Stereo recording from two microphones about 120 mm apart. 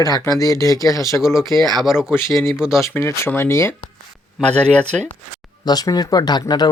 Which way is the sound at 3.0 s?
20° left (ahead or behind).